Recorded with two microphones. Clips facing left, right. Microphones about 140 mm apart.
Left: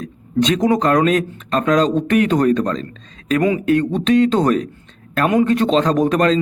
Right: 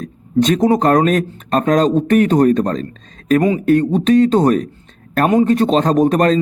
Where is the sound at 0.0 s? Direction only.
45° right (ahead or behind).